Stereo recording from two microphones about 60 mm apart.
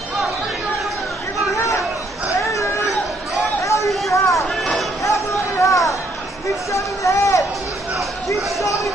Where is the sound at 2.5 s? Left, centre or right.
Left.